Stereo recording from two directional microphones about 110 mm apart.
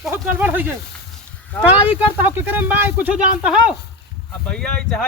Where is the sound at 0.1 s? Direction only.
15° right (ahead or behind).